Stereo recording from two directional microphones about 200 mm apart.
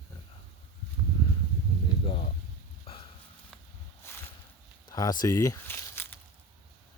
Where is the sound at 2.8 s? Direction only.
30° left (ahead or behind).